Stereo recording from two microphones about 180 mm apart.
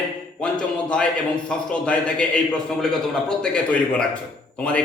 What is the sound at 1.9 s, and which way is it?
A man's voice, 5° left (ahead or behind).